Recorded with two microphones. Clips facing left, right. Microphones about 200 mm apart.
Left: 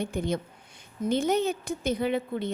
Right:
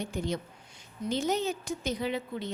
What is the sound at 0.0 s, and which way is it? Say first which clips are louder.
A woman's voice: left 4 dB; 55° left (ahead or behind).